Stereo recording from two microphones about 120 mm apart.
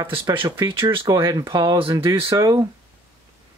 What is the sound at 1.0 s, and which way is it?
Speech, 30° right (ahead or behind).